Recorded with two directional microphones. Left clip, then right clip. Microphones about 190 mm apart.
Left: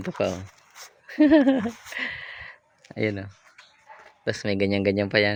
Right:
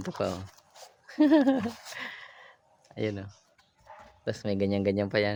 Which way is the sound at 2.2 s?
25° left (ahead or behind).